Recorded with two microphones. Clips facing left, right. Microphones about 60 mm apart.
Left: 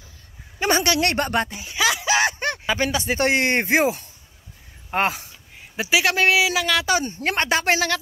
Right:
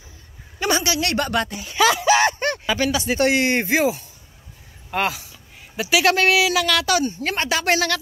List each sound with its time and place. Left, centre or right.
0.7 s speech: left
1.1 s speech: left
1.5 s speech: centre
1.8 s a sound: centre
2.6 s speech: left
5.8 s speech: left
6.0 s speech: centre
7.1 s speech: left
7.6 s speech: left